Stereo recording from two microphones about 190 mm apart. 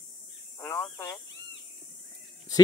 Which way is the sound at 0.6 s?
15° left (ahead or behind).